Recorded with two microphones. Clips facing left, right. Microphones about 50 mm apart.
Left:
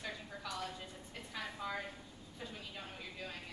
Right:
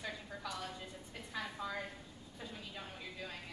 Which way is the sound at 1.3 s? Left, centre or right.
Centre.